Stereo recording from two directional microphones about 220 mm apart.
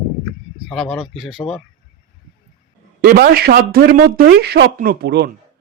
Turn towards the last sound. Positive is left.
turn(degrees=-50)  # may be behind; listen again after turning